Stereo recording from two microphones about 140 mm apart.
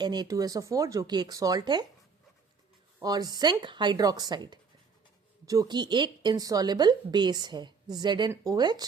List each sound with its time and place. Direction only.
0.0 s speech: 30° right (ahead or behind)
3.0 s speech: 25° right (ahead or behind)